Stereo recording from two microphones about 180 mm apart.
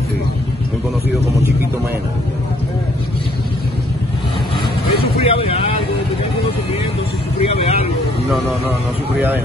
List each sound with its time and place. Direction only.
5.2 s speech: 35° left (ahead or behind)
7.4 s speech: 35° left (ahead or behind)